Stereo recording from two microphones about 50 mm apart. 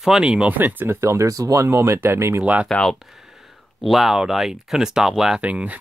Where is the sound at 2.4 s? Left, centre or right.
Right.